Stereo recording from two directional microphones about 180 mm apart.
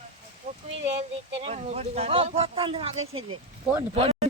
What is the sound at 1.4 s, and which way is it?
Speech, 35° right (ahead or behind).